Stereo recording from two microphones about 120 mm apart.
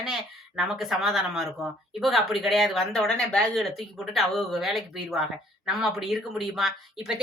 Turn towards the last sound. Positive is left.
turn(degrees=-5)  # may be behind; listen again after turning